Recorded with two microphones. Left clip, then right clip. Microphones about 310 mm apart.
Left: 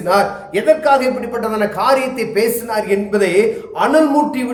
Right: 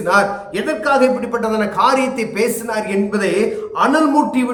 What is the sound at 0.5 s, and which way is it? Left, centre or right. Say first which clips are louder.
A man's voice: left 6 dB; centre.